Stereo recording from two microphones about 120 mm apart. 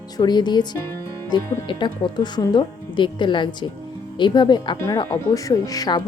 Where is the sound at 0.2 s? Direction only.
35° left (ahead or behind).